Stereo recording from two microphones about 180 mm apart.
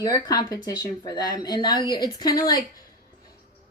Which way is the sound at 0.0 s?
20° left (ahead or behind).